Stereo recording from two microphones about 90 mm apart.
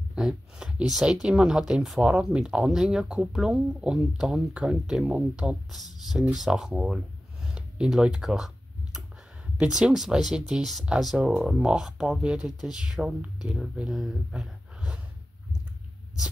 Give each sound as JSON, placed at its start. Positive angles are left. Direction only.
{"t": 0.1, "sound": "speech", "side_deg": -10}
{"t": 9.6, "sound": "speech", "side_deg": -10}